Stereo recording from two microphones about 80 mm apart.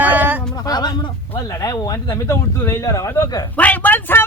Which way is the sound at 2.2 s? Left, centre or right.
Left.